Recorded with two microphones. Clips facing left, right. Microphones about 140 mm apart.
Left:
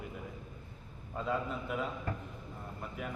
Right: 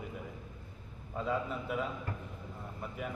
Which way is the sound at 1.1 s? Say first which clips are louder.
Right 1 dB; centre (ahead or behind).